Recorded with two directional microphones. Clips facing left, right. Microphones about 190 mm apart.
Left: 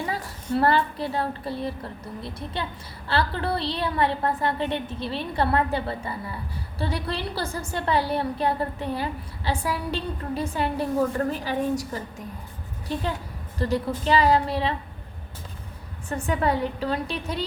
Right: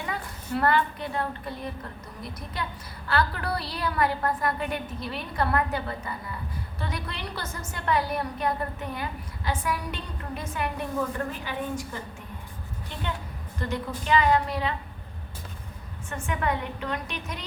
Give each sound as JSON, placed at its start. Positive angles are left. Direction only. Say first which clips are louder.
{"t": 0.0, "sound": "a woman's voice", "louder": "left 4 dB", "side_deg": 30}
{"t": 12.9, "sound": "a woman's voice", "louder": "left 6 dB", "side_deg": 35}
{"t": 16.0, "sound": "a woman's voice", "louder": "left 5 dB", "side_deg": 35}